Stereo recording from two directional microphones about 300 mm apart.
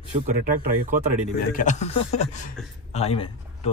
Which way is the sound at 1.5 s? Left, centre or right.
Left.